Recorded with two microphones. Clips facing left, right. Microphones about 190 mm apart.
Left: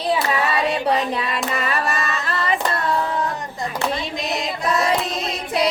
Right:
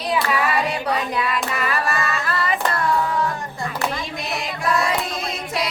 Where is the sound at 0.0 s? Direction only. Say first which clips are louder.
Left 1 dB; 30° left (ahead or behind).